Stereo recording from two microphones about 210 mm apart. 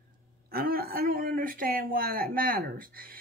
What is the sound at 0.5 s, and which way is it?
A man's voice, 45° right (ahead or behind).